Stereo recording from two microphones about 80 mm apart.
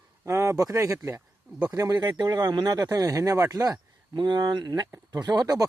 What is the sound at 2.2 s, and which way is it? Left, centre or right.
Speech, right.